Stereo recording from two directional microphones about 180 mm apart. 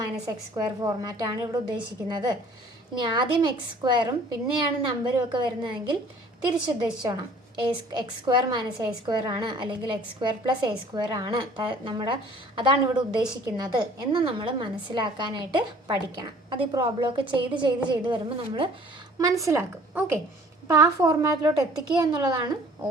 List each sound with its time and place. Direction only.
0.3 s a woman's voice: 20° right (ahead or behind)
19.2 s a woman's voice: 20° right (ahead or behind)